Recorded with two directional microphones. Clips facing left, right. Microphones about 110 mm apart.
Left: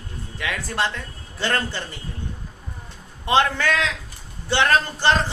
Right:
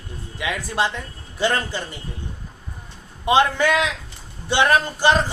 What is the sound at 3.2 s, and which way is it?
A man's voice, 15° right (ahead or behind).